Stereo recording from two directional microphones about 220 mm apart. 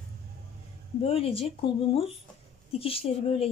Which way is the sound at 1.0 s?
25° left (ahead or behind).